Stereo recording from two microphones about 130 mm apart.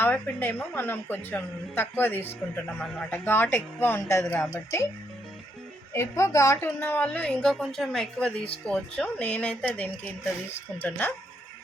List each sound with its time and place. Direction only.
0.0 s a woman's voice: 15° left (ahead or behind)
5.9 s a woman's voice: 20° left (ahead or behind)